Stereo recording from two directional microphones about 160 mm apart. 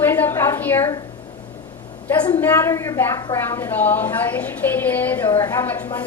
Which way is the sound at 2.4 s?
15° left (ahead or behind).